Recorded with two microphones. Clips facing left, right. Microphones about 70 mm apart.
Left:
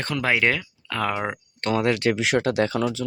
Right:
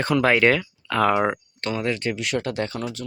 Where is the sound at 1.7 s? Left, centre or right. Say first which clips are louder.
Left 4 dB; left.